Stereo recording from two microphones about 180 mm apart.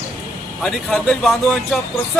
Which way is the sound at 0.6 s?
5° left (ahead or behind).